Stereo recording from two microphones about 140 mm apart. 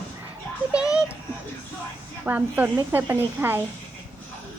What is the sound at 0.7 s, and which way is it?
Speech, 5° right (ahead or behind).